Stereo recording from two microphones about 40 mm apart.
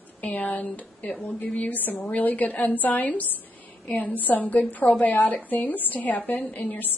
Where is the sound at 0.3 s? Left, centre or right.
Left.